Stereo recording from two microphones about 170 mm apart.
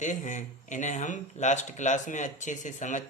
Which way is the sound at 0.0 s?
45° left (ahead or behind).